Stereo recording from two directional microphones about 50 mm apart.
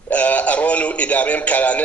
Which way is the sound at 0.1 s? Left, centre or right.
Left.